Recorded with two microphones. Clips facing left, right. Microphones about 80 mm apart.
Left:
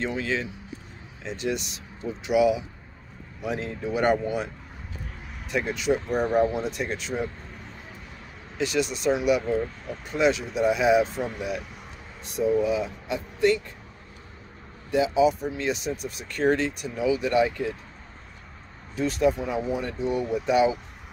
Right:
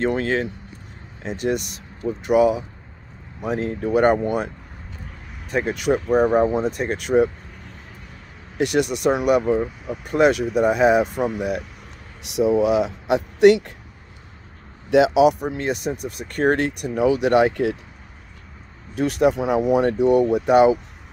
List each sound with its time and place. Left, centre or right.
0.0 s speech: right
5.5 s speech: right
6.1 s speech: right
6.5 s speech: right
8.5 s speech: right
9.4 s speech: centre
10.0 s speech: right
12.2 s speech: right
14.9 s speech: right
18.9 s speech: right